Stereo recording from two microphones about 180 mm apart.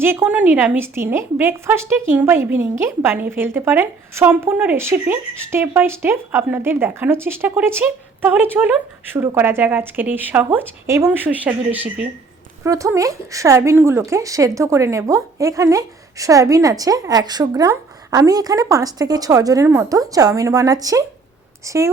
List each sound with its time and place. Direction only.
0.0 s a woman's voice: 15° right (ahead or behind)